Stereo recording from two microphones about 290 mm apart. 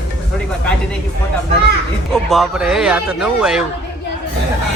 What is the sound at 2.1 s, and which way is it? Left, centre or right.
Speech, centre.